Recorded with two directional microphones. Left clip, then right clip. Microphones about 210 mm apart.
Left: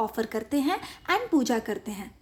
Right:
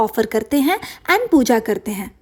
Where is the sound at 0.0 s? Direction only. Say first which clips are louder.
Right 11 dB; 35° right (ahead or behind).